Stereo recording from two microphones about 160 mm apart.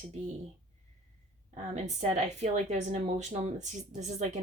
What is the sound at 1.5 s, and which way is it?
Speech, 45° right (ahead or behind).